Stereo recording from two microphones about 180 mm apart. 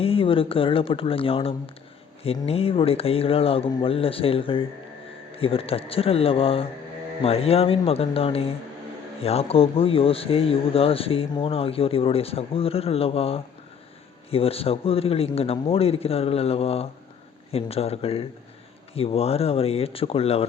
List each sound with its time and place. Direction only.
0.0 s speech: 30° left (ahead or behind)